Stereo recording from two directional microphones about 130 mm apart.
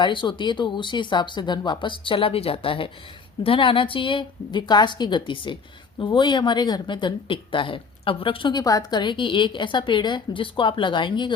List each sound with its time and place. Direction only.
0.0 s speech: 35° left (ahead or behind)